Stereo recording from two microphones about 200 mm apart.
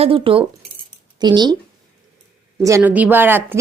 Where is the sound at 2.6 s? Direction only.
10° right (ahead or behind).